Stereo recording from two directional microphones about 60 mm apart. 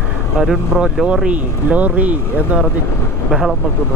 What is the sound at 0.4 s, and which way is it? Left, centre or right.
Speech, centre.